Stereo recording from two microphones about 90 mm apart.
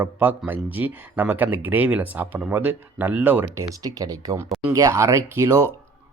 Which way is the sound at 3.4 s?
35° right (ahead or behind).